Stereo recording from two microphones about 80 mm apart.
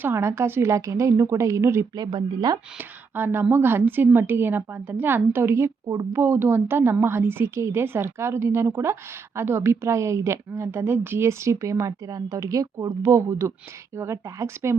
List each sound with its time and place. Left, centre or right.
0.0 s a woman's voice: right
2.0 s speech: right
2.7 s a woman's voice: right
6.1 s a woman's voice: right